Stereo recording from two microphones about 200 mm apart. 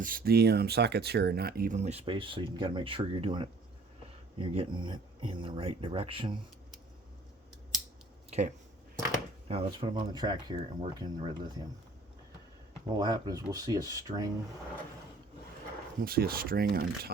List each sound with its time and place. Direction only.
0.0 s speech: 45° right (ahead or behind); by 6.3 s 25° right (ahead or behind)
8.3 s speech: 35° right (ahead or behind)
13.0 s speech: 20° right (ahead or behind)
16.0 s speech: 50° right (ahead or behind)